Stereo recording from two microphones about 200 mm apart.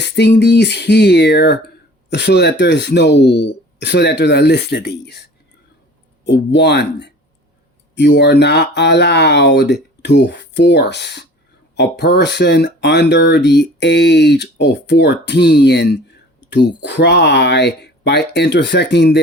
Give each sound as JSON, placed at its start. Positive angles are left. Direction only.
{"t": 0.0, "sound": "speech", "side_deg": 55}
{"t": 6.2, "sound": "speech", "side_deg": 60}